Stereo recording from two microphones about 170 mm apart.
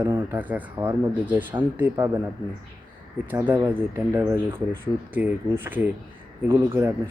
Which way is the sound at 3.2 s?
10° right (ahead or behind).